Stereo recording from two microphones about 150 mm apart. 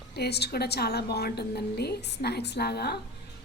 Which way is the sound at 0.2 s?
90° left.